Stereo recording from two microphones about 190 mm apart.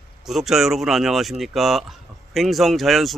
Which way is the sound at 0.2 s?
Centre (ahead or behind).